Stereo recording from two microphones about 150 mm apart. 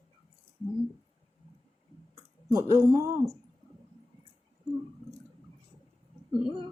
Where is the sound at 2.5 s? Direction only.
20° right (ahead or behind).